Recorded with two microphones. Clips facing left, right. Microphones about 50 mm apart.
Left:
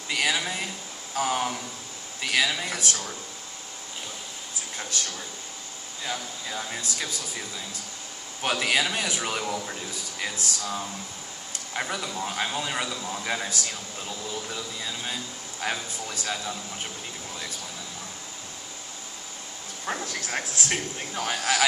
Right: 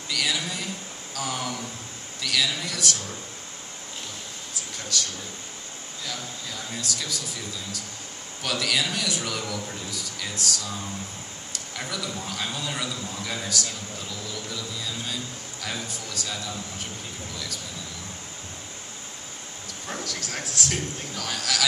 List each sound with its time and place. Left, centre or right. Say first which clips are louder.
0.1 s a man's voice: left 2 dB; left
4.7 s speech: right 2 dB; left
6.0 s a man's voice: left 3 dB; left
12.1 s a man's voice: left 3 dB; left
19.9 s a man's voice: left 3 dB; left